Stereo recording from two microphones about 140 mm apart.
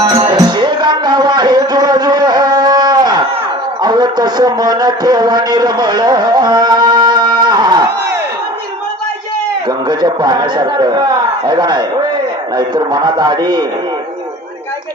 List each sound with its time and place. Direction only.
0.0 s music: 30° right (ahead or behind)
3.8 s a man's voice: 30° right (ahead or behind)
9.6 s speech: 30° right (ahead or behind)